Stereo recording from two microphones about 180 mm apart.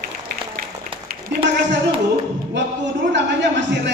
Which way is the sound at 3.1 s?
80° right.